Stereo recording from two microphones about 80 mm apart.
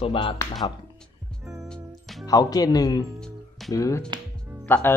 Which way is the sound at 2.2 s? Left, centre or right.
Left.